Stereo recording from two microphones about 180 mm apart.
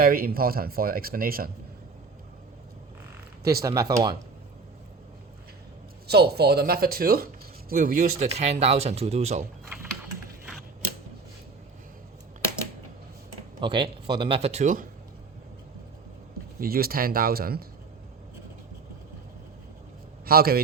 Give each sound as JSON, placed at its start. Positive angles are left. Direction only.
{"t": 0.0, "sound": "speech", "side_deg": -55}
{"t": 3.4, "sound": "speech", "side_deg": -20}
{"t": 6.1, "sound": "speech", "side_deg": -60}
{"t": 13.6, "sound": "speech", "side_deg": -30}
{"t": 16.6, "sound": "speech", "side_deg": -55}
{"t": 20.2, "sound": "speech", "side_deg": -55}